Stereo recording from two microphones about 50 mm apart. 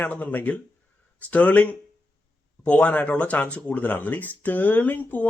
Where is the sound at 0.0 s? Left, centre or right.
Left.